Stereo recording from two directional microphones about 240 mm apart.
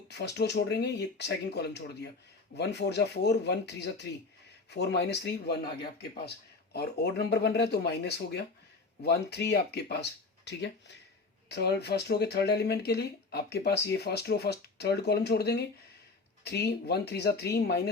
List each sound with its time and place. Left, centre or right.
0.1 s speech: left